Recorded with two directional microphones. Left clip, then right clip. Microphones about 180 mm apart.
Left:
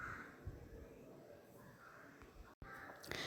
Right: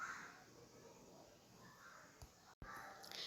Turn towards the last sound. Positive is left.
turn(degrees=45)  # may be behind; listen again after turning